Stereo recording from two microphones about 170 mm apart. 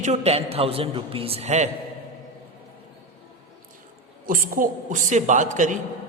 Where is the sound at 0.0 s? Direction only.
40° right (ahead or behind).